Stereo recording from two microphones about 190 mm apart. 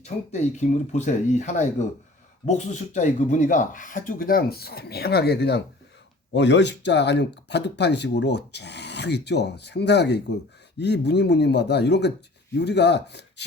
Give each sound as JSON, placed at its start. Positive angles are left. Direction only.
{"t": 0.0, "sound": "speech", "side_deg": 35}